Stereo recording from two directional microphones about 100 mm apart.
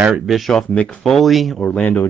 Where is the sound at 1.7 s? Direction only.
15° left (ahead or behind).